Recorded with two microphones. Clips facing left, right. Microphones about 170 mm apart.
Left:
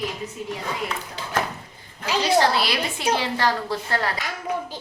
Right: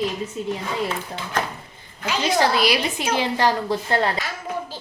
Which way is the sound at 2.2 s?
15° right (ahead or behind).